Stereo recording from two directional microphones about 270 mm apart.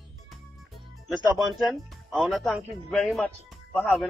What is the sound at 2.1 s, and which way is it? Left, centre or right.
A man's voice, centre.